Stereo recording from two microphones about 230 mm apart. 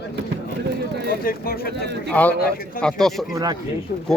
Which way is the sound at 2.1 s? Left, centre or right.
Centre.